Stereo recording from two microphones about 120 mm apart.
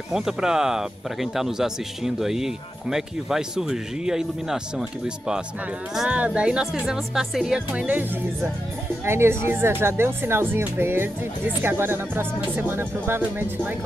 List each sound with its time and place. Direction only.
0.1 s speech: 5° right (ahead or behind)